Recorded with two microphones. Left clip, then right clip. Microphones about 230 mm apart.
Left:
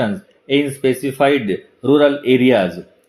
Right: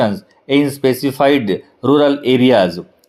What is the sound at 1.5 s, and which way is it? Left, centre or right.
Speech, right.